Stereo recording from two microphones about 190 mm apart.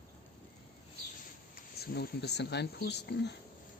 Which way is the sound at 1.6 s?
55° left (ahead or behind).